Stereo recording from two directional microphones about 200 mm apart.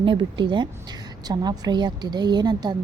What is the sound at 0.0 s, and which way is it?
A woman's voice, 25° right (ahead or behind).